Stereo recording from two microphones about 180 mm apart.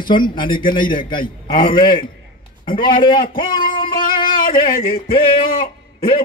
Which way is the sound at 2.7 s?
25° left (ahead or behind).